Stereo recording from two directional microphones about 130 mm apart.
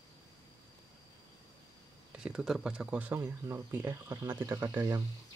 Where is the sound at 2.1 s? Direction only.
10° right (ahead or behind).